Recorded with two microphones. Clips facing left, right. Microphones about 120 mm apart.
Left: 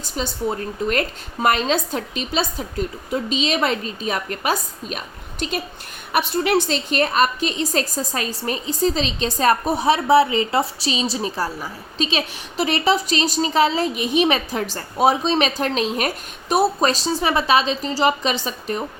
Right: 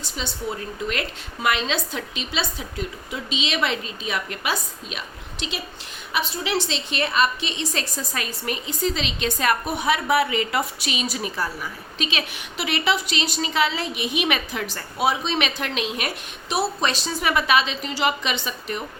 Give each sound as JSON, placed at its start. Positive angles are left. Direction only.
{"t": 0.0, "sound": "a woman's voice", "side_deg": 45}